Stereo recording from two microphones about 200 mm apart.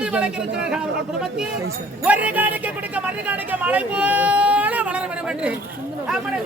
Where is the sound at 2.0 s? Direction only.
5° right (ahead or behind).